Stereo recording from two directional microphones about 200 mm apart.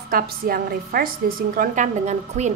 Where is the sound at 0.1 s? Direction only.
50° right (ahead or behind).